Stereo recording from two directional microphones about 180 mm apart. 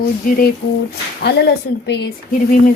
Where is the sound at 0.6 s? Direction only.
60° left (ahead or behind).